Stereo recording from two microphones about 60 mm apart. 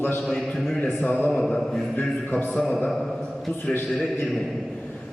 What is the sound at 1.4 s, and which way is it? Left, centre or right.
Mantra, centre.